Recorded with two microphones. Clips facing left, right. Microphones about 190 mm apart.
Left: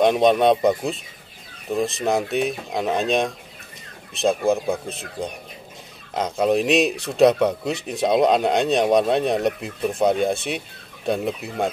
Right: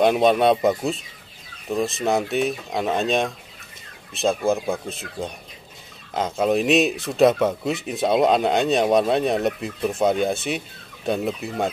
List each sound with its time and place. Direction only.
0.0 s speech: 5° right (ahead or behind)
6.1 s speech: centre (ahead or behind)